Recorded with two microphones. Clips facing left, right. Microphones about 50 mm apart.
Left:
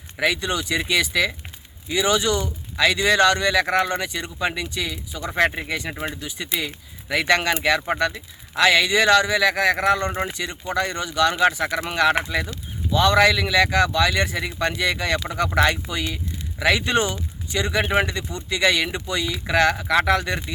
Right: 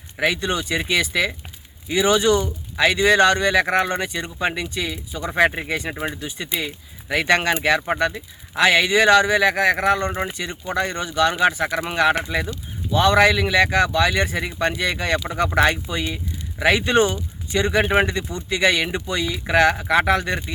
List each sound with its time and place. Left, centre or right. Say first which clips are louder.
0.2 s speech: right 1 dB; centre
5.6 s speech: right 2 dB; right
5.9 s speech: right 2 dB; centre
7.8 s speech: right 1 dB; centre
8.0 s speech: right 1 dB; centre